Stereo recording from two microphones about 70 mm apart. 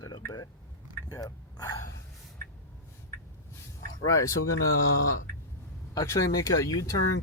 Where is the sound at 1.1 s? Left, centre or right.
Left.